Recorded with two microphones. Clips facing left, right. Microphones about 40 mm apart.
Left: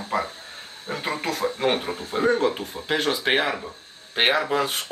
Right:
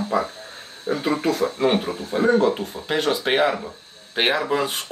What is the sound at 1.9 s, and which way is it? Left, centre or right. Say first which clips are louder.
Speech: right 2 dB; left.